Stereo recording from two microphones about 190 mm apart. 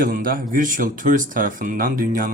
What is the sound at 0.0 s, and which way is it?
Speech, 50° right (ahead or behind).